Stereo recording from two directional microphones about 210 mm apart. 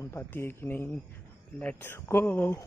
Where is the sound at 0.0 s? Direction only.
10° left (ahead or behind).